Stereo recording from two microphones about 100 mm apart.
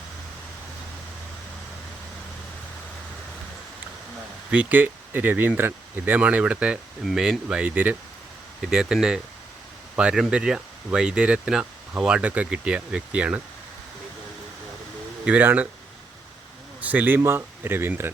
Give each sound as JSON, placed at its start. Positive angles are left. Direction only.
{"t": 4.5, "sound": "speech", "side_deg": -20}
{"t": 15.2, "sound": "speech", "side_deg": -15}
{"t": 16.8, "sound": "speech", "side_deg": -15}